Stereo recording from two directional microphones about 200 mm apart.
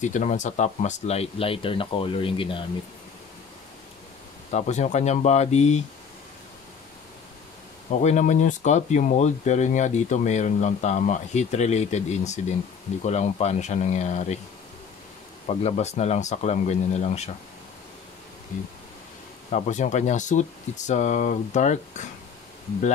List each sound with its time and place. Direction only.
0.0 s speech: 40° left (ahead or behind)
4.5 s speech: 35° left (ahead or behind)
7.9 s speech: 35° left (ahead or behind)
15.4 s speech: 35° left (ahead or behind)
18.5 s speech: 40° left (ahead or behind)